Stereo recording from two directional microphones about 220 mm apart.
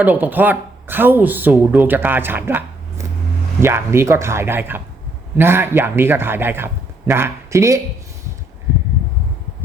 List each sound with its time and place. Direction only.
0.0 s a man's voice: 10° right (ahead or behind)